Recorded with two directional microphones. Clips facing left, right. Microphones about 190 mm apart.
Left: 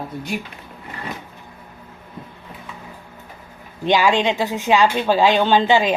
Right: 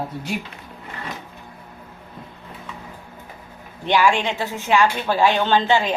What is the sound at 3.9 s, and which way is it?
Speech, 15° left (ahead or behind).